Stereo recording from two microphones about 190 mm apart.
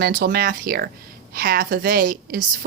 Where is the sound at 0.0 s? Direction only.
50° right (ahead or behind).